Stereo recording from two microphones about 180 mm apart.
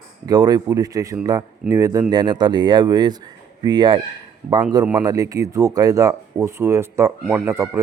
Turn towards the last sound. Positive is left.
turn(degrees=-15)  # may be behind; listen again after turning